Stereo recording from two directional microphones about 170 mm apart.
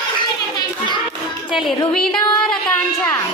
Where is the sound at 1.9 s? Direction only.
5° left (ahead or behind).